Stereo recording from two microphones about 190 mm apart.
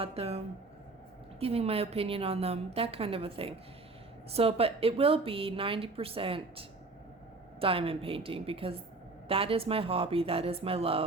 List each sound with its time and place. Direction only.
0.0 s a woman's voice: 30° right (ahead or behind)